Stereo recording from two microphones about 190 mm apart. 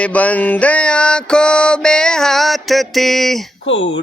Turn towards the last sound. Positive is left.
turn(degrees=80)